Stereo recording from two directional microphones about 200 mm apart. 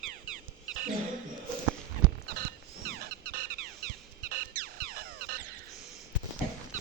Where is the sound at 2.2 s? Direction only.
45° right (ahead or behind).